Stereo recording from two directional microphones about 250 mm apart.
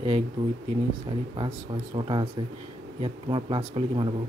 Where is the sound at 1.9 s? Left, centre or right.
Centre.